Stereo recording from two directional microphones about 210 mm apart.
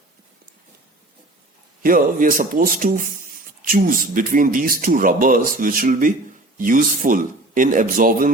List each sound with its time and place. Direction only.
1.8 s speech: 40° right (ahead or behind)